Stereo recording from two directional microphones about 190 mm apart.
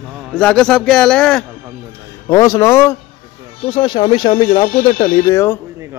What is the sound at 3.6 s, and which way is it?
Speech, 25° left (ahead or behind).